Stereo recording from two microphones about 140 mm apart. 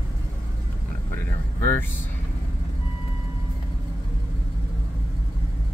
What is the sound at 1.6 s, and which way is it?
Vehicle, 15° left (ahead or behind).